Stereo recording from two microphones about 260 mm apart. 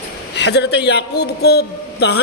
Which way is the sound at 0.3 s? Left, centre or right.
Left.